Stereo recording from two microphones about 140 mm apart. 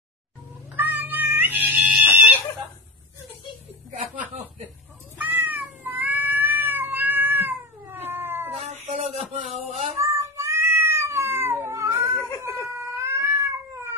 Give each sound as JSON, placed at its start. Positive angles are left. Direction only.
{"t": 0.7, "sound": "cat", "side_deg": -15}
{"t": 5.1, "sound": "cat", "side_deg": -10}
{"t": 8.5, "sound": "music", "side_deg": -55}
{"t": 9.4, "sound": "a sound", "side_deg": -50}
{"t": 9.9, "sound": "cat", "side_deg": -20}